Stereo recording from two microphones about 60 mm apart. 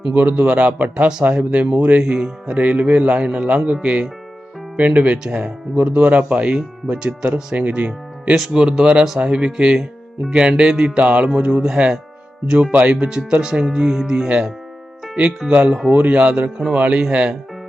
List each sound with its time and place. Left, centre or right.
0.1 s a man's voice: right
5.7 s a man's voice: right
7.2 s speech: centre
7.5 s speech: right
8.5 s a man's voice: centre
12.7 s a man's voice: centre